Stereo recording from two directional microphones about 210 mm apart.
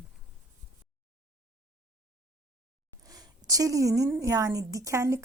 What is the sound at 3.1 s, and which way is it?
A woman's voice, 15° right (ahead or behind).